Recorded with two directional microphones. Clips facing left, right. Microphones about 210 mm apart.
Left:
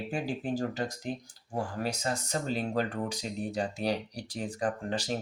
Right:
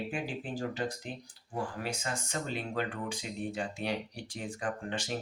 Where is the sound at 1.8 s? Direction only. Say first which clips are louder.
Left 4 dB; 40° left (ahead or behind).